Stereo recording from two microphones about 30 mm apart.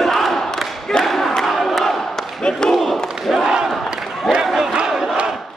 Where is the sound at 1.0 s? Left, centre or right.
Centre.